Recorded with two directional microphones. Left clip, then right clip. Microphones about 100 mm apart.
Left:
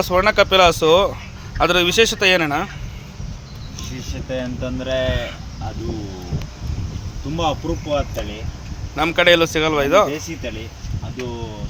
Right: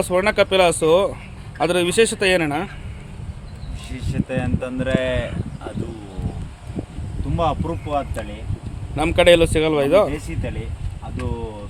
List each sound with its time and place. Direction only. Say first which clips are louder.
0.0 s speech: left 2 dB; 40° right (ahead or behind)
1.5 s a man's voice: left 2 dB; 50° right (ahead or behind)
4.3 s speech: left 1 dB; 30° right (ahead or behind)
7.3 s speech: even; 5° right (ahead or behind)
9.0 s a man's voice: even; 70° right (ahead or behind)